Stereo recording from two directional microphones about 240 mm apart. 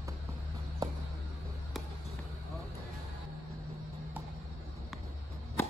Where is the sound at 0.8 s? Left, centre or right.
Centre.